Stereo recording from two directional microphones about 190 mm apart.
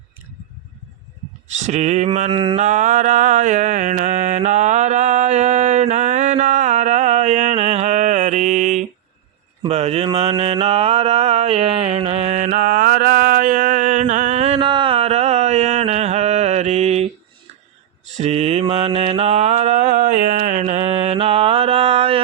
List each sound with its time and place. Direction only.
1.5 s mantra: 40° right (ahead or behind)
2.3 s mantra: 25° right (ahead or behind)
2.6 s mantra: 40° right (ahead or behind)
18.2 s mantra: 35° right (ahead or behind)